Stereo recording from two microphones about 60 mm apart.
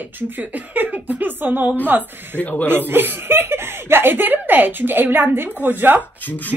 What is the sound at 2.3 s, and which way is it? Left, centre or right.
Speech, left.